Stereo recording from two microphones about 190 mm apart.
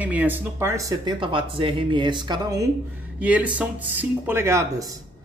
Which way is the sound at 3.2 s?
10° right (ahead or behind).